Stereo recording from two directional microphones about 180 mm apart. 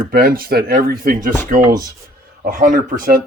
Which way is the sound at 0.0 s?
55° right (ahead or behind).